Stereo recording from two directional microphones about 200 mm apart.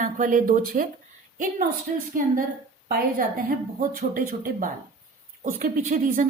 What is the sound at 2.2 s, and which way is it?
A woman's voice, 45° right (ahead or behind).